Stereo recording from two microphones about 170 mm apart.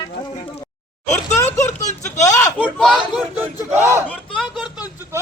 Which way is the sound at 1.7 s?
45° left (ahead or behind).